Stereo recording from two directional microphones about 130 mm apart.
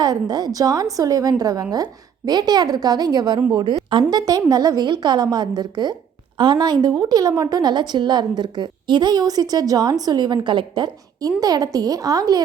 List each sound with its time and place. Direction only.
0.0 s a woman's voice: 30° right (ahead or behind)